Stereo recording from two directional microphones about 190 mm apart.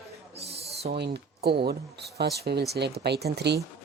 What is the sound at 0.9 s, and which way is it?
Speech, 60° right (ahead or behind).